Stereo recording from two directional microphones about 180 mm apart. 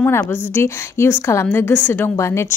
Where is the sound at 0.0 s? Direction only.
10° left (ahead or behind).